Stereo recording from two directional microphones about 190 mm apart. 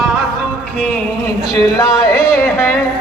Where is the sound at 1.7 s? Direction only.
20° left (ahead or behind).